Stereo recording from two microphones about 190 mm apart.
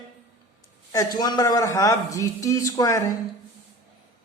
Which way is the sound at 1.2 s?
20° left (ahead or behind).